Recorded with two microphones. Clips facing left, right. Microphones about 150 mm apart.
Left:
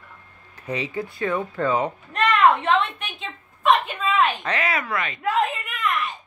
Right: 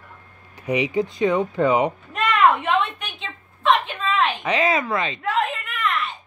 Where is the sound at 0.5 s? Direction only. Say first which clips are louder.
Right 6 dB; 15° right (ahead or behind).